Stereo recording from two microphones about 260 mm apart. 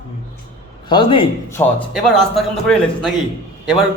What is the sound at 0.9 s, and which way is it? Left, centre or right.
Speech, centre.